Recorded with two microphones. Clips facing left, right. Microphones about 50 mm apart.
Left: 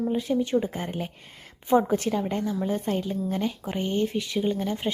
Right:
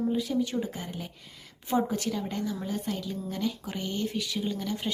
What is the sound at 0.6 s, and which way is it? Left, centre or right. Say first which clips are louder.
A woman's voice: left 5 dB; left.